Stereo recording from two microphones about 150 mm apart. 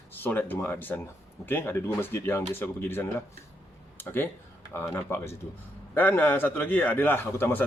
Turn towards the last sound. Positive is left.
turn(degrees=15)  # may be behind; listen again after turning